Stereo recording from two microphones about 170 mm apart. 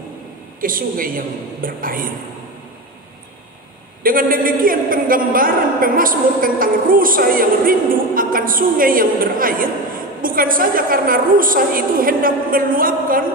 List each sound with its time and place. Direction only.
0.6 s a man's voice: 55° right (ahead or behind)
4.0 s a man's voice: 55° right (ahead or behind)